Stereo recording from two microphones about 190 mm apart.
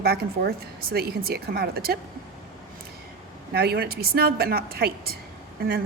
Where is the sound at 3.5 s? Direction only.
55° right (ahead or behind).